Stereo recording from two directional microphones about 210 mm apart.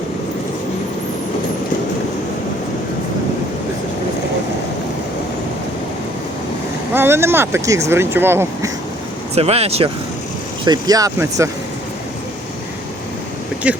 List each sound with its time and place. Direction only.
6.9 s speech: 10° right (ahead or behind)
9.3 s speech: 30° right (ahead or behind)
10.7 s speech: 15° right (ahead or behind)
13.7 s speech: 5° right (ahead or behind)